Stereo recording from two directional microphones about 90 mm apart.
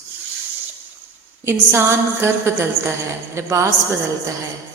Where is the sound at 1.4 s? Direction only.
30° right (ahead or behind).